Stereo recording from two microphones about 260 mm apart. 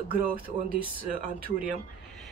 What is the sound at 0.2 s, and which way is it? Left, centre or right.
Speech, right.